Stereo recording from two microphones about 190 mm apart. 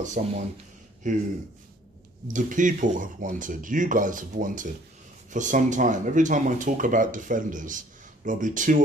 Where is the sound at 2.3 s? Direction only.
40° right (ahead or behind).